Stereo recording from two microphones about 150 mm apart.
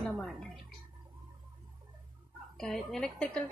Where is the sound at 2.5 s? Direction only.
Centre (ahead or behind).